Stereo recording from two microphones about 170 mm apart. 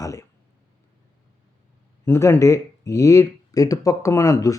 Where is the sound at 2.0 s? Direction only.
15° left (ahead or behind).